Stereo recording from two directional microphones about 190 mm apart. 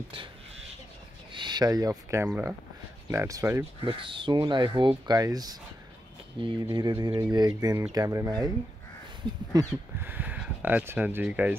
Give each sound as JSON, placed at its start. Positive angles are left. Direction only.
{"t": 1.3, "sound": "speech", "side_deg": -25}
{"t": 3.8, "sound": "speech", "side_deg": -25}